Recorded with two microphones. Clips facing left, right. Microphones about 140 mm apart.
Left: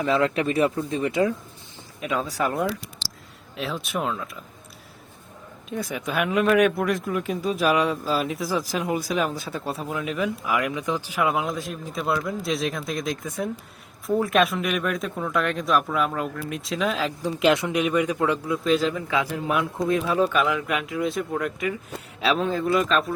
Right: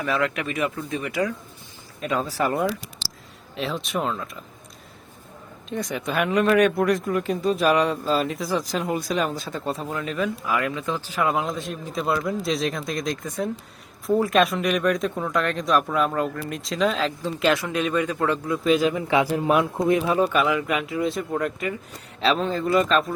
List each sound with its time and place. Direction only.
0.0 s speech: 25° left (ahead or behind)
2.0 s speech: centre (ahead or behind)
5.6 s speech: 5° left (ahead or behind)
18.6 s a man's voice: 10° right (ahead or behind)
19.0 s speech: 30° right (ahead or behind)
19.9 s speech: 10° right (ahead or behind)